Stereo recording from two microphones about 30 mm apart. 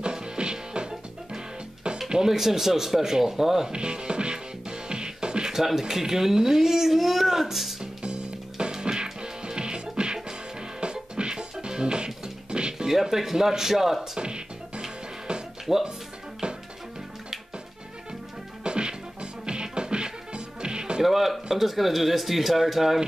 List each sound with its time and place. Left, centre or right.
0.0 s music: right
2.2 s speech: centre
3.7 s music: right
5.8 s speech: centre
7.8 s music: right
12.8 s speech: centre
14.1 s music: right
15.7 s speech: centre
18.6 s music: right
21.0 s a man's voice: centre